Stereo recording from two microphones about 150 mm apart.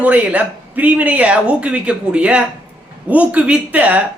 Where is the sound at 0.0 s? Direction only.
10° right (ahead or behind).